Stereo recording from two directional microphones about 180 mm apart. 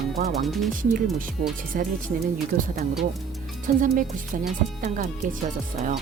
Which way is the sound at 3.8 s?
50° right (ahead or behind).